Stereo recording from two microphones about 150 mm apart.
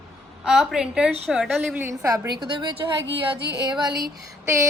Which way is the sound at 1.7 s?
20° right (ahead or behind).